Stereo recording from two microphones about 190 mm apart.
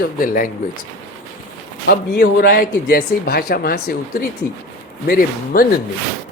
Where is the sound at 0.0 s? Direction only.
45° left (ahead or behind).